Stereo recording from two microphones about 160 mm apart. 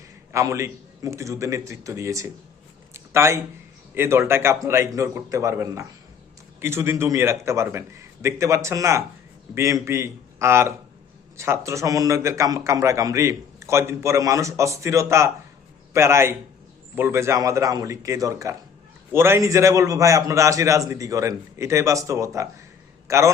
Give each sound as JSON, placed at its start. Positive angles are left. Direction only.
{"t": 0.3, "sound": "a man's voice", "side_deg": -20}
{"t": 2.9, "sound": "a sound", "side_deg": -15}
{"t": 3.9, "sound": "a man's voice", "side_deg": -15}